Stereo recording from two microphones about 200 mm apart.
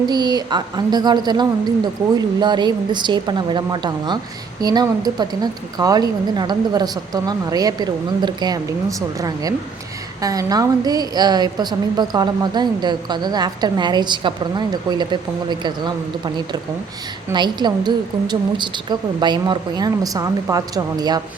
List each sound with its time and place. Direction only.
0.0 s a woman's voice: 20° right (ahead or behind)